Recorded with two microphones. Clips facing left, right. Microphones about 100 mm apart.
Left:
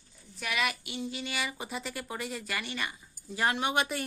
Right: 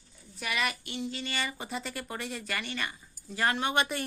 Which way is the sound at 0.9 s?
15° left (ahead or behind).